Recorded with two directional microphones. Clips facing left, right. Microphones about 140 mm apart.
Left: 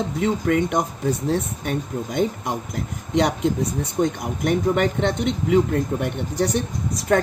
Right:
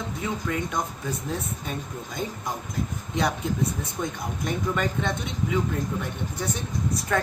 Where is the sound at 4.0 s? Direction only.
70° left (ahead or behind).